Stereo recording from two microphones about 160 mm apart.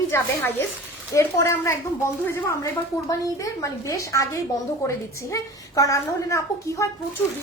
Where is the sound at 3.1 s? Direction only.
20° left (ahead or behind).